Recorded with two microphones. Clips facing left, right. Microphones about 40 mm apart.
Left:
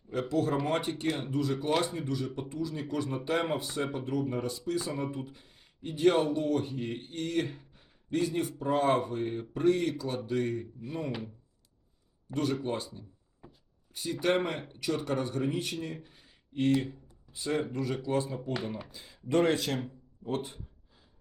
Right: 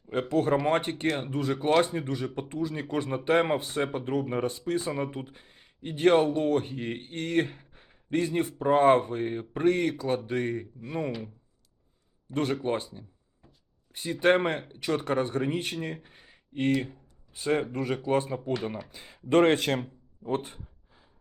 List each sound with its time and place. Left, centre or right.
0.1 s speech: right
12.3 s speech: right
16.0 s a sound: right
17.3 s speech: right